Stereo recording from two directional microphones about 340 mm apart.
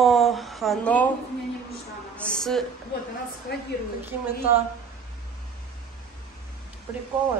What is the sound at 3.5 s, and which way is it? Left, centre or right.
Speech, left.